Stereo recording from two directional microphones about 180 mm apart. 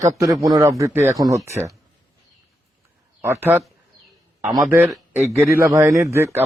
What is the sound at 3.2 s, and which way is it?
Speech, 15° right (ahead or behind).